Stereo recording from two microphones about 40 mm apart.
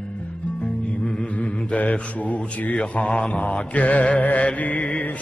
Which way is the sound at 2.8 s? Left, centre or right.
Left.